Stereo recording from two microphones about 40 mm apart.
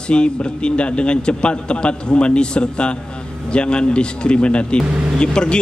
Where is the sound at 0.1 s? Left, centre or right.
Left.